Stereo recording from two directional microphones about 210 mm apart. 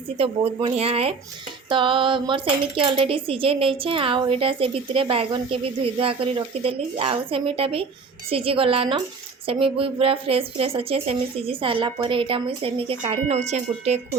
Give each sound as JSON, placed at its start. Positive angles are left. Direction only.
{"t": 0.2, "sound": "speech", "side_deg": -25}